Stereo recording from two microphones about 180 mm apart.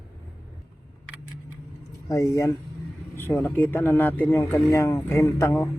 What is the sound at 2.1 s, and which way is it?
Speech, 20° left (ahead or behind).